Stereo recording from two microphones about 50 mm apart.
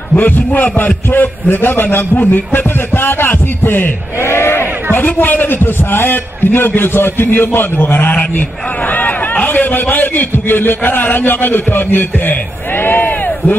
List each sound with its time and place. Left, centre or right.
0.5 s a man's voice: left
4.9 s a man's voice: left
12.8 s a sound: left